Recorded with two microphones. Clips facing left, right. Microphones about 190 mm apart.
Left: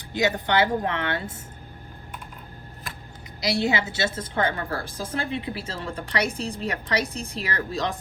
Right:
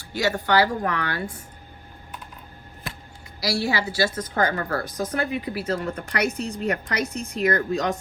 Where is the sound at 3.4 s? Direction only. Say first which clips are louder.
Left 1 dB; 20° left (ahead or behind).